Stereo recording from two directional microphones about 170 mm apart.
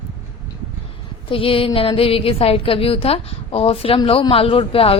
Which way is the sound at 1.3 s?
30° left (ahead or behind).